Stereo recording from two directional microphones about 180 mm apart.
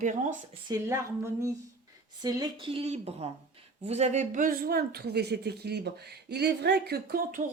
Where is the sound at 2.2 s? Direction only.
20° right (ahead or behind); by 7.5 s 50° right (ahead or behind).